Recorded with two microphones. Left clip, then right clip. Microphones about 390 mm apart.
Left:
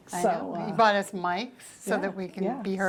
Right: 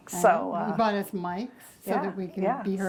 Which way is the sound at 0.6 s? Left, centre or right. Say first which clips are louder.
Left 4 dB; left.